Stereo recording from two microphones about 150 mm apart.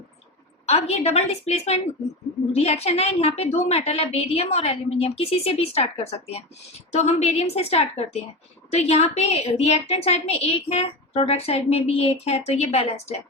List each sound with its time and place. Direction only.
0.6 s a woman's voice: 45° left (ahead or behind)